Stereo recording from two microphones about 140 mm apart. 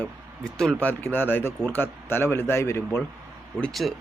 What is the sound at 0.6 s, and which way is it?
Speech, 10° left (ahead or behind).